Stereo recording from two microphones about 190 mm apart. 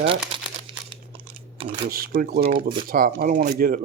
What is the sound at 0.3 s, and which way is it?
Crumpling, 30° right (ahead or behind).